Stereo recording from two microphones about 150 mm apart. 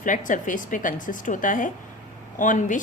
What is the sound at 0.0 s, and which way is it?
Speech, 60° left (ahead or behind).